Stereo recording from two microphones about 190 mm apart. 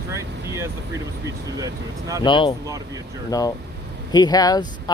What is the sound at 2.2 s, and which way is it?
Speech, 25° left (ahead or behind).